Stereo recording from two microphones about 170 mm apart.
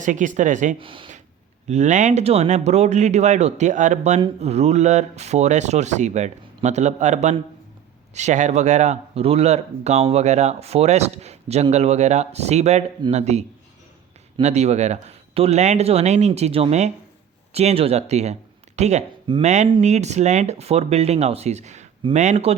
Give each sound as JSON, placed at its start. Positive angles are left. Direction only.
{"t": 0.0, "sound": "speech", "side_deg": -50}
{"t": 0.8, "sound": "speech", "side_deg": -30}
{"t": 1.6, "sound": "speech", "side_deg": -45}
{"t": 14.4, "sound": "speech", "side_deg": -40}